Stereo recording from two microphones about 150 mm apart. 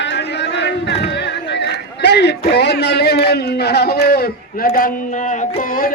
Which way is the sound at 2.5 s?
90° left.